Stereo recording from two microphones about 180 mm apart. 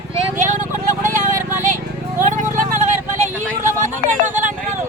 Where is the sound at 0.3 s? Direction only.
45° right (ahead or behind).